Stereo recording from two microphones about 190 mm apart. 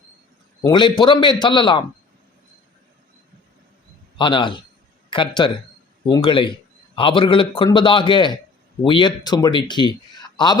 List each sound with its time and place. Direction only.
0.6 s a man's voice: 25° left (ahead or behind)
4.2 s a man's voice: 25° left (ahead or behind)